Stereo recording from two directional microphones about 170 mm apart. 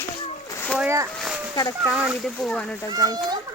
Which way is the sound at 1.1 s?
Centre (ahead or behind).